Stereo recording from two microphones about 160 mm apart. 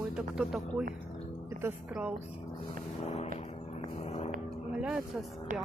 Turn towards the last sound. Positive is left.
turn(degrees=-55)  # may be behind; listen again after turning